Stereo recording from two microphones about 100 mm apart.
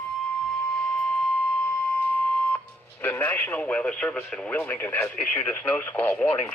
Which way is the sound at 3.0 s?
20° left (ahead or behind).